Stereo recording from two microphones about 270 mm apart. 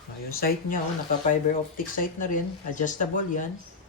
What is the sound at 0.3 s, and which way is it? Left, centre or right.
Speech, left.